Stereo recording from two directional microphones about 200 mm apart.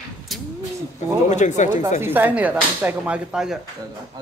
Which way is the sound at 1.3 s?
35° left (ahead or behind).